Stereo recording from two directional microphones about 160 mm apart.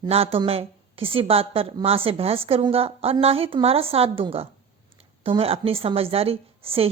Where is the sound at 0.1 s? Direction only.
35° right (ahead or behind).